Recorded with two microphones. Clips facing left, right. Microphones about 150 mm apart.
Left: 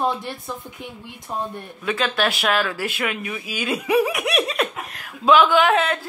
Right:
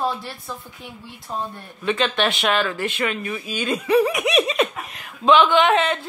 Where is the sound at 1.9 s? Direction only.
5° left (ahead or behind).